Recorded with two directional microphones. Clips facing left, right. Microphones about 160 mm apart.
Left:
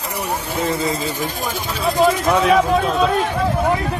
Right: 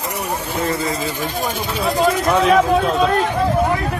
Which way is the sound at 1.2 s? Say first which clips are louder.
Right 1 dB; 40° right (ahead or behind).